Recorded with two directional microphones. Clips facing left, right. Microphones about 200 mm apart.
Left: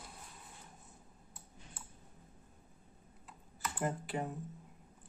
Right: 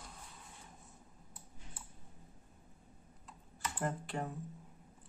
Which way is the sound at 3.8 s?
5° left (ahead or behind).